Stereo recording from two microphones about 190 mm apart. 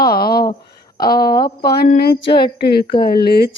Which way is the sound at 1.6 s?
55° left (ahead or behind).